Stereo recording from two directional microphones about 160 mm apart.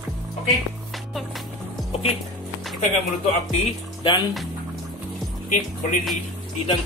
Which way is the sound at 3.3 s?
45° left (ahead or behind).